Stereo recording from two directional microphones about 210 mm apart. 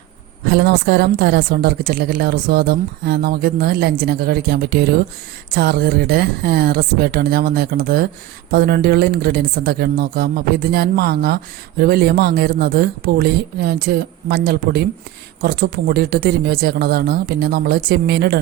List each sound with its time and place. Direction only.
0.4 s a woman's voice: 50° right (ahead or behind)